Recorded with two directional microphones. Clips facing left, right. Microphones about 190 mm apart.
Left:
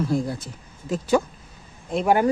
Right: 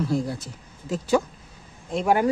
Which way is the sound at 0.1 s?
50° left (ahead or behind).